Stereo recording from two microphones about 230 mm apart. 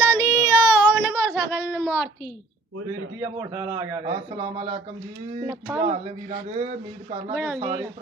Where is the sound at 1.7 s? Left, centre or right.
Centre.